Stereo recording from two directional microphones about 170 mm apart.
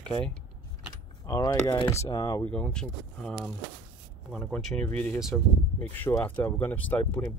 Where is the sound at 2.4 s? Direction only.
5° left (ahead or behind).